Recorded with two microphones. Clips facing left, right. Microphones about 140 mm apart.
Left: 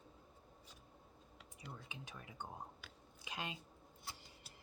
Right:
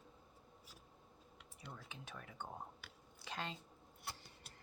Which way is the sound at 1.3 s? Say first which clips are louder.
Left 1 dB; 5° left (ahead or behind).